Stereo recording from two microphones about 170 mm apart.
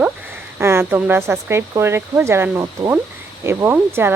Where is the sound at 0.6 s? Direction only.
15° right (ahead or behind).